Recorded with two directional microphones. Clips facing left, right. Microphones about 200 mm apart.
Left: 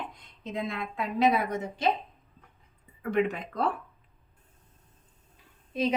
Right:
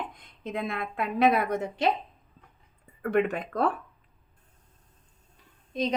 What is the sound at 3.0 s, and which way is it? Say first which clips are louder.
Speech: right 2 dB; 55° right (ahead or behind).